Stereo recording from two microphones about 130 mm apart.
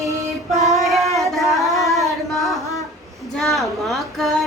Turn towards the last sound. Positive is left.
turn(degrees=0)  # may be behind; listen again after turning